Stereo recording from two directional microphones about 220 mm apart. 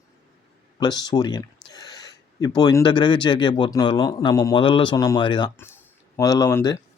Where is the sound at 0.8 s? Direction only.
20° left (ahead or behind).